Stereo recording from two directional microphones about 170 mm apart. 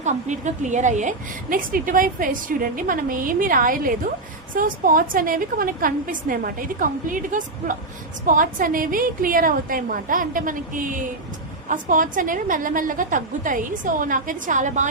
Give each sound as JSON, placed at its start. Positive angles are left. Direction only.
{"t": 0.0, "sound": "a woman's voice", "side_deg": -45}